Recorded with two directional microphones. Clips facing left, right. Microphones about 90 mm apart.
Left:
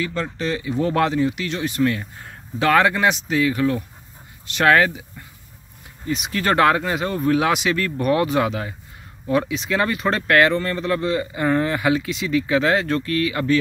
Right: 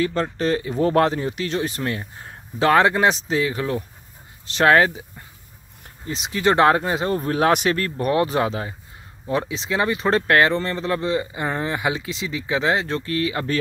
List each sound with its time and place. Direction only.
0.0 s speech: 40° right (ahead or behind)
6.0 s speech: 25° right (ahead or behind)